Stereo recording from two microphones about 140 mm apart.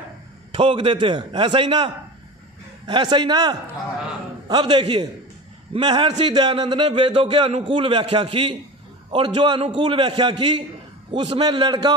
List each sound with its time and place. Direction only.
0.5 s a man's voice: 40° right (ahead or behind)
2.9 s a man's voice: 35° right (ahead or behind)